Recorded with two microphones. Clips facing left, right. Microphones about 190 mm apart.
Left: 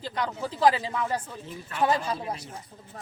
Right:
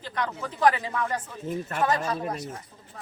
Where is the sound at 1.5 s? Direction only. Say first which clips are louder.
Right 13 dB; 45° right (ahead or behind).